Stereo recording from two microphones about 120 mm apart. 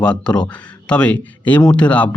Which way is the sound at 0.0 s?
10° left (ahead or behind).